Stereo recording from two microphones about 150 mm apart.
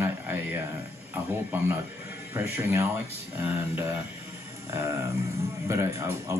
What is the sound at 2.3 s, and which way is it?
Speech, 15° right (ahead or behind).